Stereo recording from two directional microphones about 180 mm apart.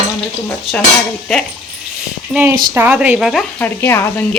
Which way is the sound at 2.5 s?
15° right (ahead or behind).